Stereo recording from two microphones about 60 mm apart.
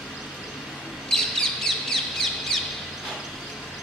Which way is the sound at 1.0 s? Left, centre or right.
Centre.